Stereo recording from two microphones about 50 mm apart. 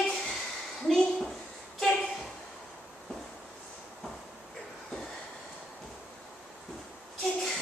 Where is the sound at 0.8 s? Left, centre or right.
Centre.